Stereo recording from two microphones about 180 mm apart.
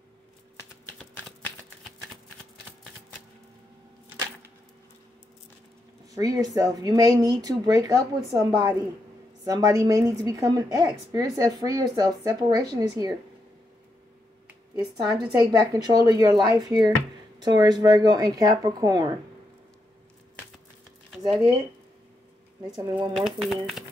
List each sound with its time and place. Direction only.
0.9 s typing: 10° left (ahead or behind)
6.1 s a woman's voice: 20° right (ahead or behind)
15.3 s a woman's voice: 20° right (ahead or behind)
21.3 s speech: centre (ahead or behind)
23.1 s speech: centre (ahead or behind)